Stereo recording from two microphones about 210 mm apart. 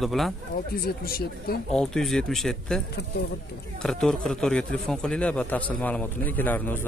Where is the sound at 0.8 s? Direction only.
45° left (ahead or behind).